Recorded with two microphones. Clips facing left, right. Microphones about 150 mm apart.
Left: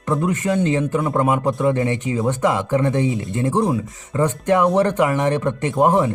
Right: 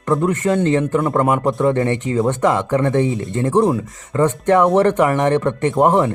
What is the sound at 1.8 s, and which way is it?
Speech, 20° left (ahead or behind).